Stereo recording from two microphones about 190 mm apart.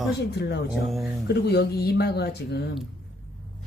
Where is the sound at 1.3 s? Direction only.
60° left (ahead or behind).